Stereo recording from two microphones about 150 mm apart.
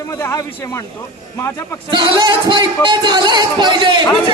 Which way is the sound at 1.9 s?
30° right (ahead or behind).